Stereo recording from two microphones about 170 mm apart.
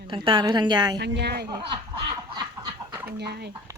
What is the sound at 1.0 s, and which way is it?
Speech, 80° right.